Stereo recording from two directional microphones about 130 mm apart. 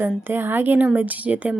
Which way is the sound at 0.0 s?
15° right (ahead or behind).